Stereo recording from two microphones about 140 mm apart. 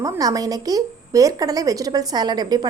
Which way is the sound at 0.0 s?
25° right (ahead or behind).